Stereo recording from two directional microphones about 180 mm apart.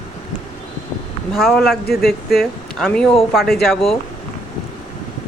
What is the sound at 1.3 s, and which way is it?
Speech, centre (ahead or behind).